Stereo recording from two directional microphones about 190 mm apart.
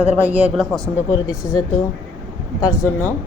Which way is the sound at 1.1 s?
20° left (ahead or behind).